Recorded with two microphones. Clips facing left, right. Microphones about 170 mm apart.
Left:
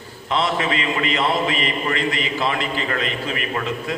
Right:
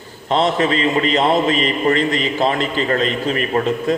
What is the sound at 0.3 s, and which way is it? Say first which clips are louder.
A man's voice: right 5 dB; 35° right (ahead or behind).